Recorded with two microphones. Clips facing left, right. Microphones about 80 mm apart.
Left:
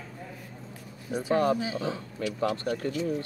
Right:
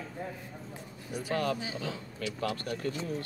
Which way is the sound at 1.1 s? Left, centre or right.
Left.